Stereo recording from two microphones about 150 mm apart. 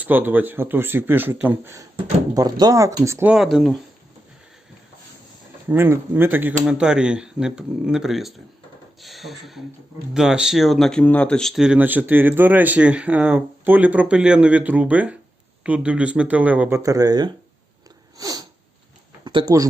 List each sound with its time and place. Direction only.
0.0 s speech: 10° right (ahead or behind)
3.3 s speech: 5° right (ahead or behind)
5.6 s speech: 15° right (ahead or behind)
18.2 s sniff: 25° right (ahead or behind)
19.2 s speech: 30° right (ahead or behind)